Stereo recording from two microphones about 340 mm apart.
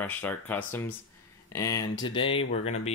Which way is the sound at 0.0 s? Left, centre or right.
Centre.